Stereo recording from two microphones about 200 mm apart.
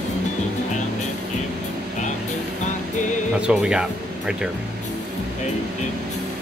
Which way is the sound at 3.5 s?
5° right (ahead or behind).